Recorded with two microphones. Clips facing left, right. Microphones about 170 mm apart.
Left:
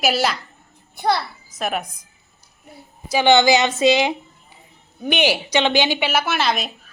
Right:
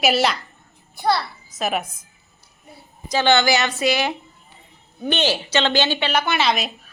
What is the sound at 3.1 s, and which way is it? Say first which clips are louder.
A woman's voice: left 3 dB; 15° left (ahead or behind).